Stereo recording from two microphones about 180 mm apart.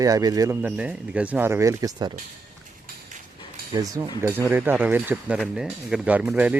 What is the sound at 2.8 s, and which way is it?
Cutlery, 45° right (ahead or behind).